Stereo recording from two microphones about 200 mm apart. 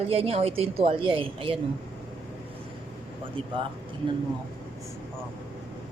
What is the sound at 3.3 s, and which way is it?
Speech, 25° right (ahead or behind).